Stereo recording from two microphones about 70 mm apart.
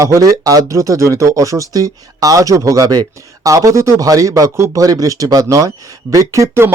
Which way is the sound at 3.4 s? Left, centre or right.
Right.